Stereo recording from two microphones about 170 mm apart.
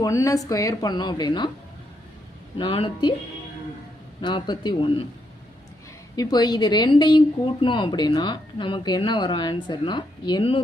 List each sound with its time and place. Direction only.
0.0 s speech: 20° left (ahead or behind)
2.6 s speech: 30° left (ahead or behind)
4.2 s speech: 25° left (ahead or behind)
6.1 s speech: 25° left (ahead or behind)